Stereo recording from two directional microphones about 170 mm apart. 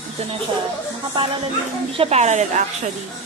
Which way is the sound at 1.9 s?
35° right (ahead or behind).